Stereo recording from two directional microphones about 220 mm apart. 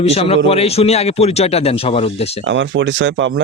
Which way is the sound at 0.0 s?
25° left (ahead or behind).